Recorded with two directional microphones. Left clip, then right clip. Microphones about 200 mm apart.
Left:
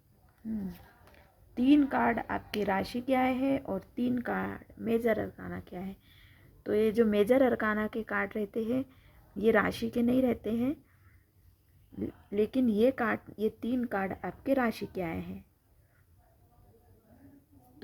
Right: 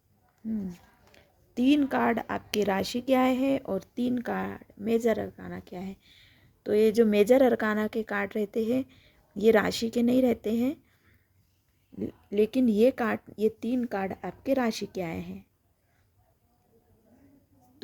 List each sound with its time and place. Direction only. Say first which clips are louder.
1.1 s speech: right 4 dB; 45° right (ahead or behind)
11.9 s speech: right 4 dB; 40° right (ahead or behind)